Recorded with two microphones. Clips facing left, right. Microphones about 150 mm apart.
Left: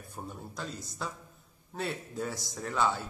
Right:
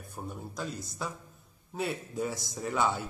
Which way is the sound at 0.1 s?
5° right (ahead or behind).